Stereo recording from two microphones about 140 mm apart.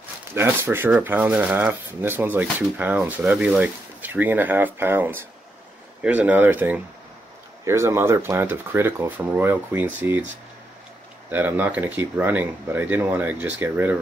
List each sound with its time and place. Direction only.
0.3 s speech: 15° right (ahead or behind)
11.2 s speech: 10° right (ahead or behind)